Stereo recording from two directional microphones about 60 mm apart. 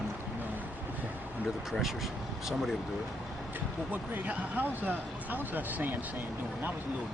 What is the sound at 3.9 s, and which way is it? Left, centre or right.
Speech, right.